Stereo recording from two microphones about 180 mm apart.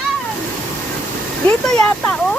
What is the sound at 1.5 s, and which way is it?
Speech, 5° left (ahead or behind).